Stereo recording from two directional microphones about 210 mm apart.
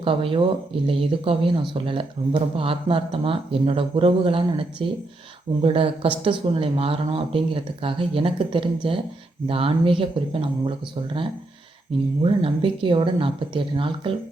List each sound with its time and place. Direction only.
0.0 s speech: 25° right (ahead or behind)
12.2 s speech: 25° right (ahead or behind)